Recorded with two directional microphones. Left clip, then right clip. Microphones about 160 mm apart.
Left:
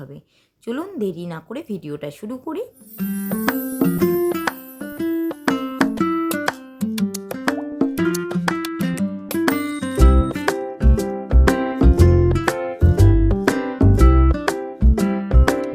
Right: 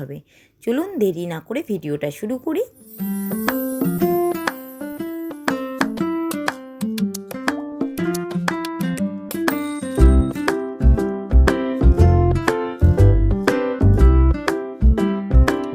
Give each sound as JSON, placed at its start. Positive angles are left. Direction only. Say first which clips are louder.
{"t": 0.6, "sound": "a woman's voice", "louder": "right 5 dB", "side_deg": -15}
{"t": 3.0, "sound": "music", "louder": "left 1 dB", "side_deg": 0}